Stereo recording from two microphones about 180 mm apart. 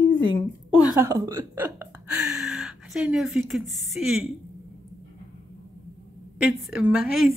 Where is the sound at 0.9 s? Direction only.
15° right (ahead or behind).